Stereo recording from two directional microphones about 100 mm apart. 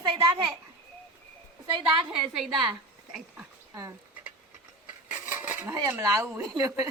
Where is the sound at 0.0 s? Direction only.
50° right (ahead or behind).